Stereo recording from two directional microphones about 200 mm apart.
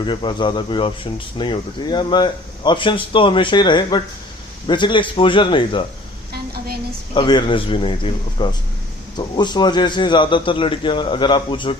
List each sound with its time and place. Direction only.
0.0 s speech: 25° left (ahead or behind)
6.3 s a sound: 50° right (ahead or behind)
7.1 s speech: 25° left (ahead or behind)